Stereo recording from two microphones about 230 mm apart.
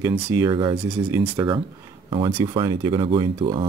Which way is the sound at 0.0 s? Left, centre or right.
Centre.